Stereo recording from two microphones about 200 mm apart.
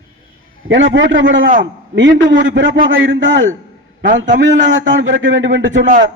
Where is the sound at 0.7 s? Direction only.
65° right (ahead or behind).